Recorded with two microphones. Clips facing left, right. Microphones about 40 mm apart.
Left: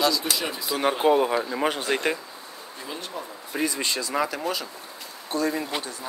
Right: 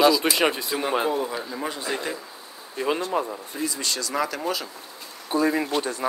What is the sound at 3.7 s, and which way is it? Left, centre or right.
Speech, left.